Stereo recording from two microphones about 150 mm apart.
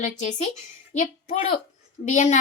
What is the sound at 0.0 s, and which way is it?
A woman's voice, 50° left (ahead or behind).